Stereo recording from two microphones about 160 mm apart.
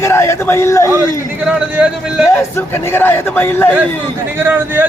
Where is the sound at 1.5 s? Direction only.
5° right (ahead or behind).